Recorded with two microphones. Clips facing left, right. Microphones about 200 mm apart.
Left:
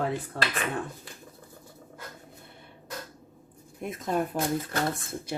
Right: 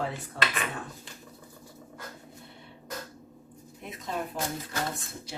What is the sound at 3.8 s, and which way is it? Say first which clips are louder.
Speech: left 6 dB; 50° left (ahead or behind).